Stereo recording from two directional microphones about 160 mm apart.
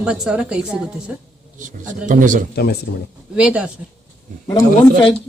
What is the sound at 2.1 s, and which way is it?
Speech, 55° right (ahead or behind).